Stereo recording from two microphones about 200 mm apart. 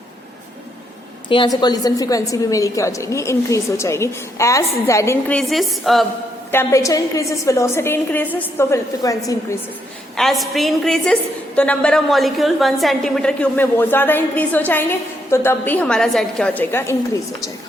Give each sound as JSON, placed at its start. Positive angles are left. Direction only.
{"t": 1.3, "sound": "a woman's voice", "side_deg": 25}
{"t": 5.4, "sound": "a woman's voice", "side_deg": 0}
{"t": 6.5, "sound": "a woman's voice", "side_deg": 10}
{"t": 10.2, "sound": "a woman's voice", "side_deg": 0}